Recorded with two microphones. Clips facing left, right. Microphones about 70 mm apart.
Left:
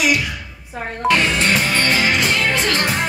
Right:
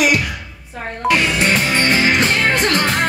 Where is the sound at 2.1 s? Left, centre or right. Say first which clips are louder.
Right 2 dB; right.